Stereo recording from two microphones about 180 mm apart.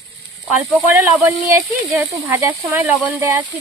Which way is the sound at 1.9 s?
10° right (ahead or behind).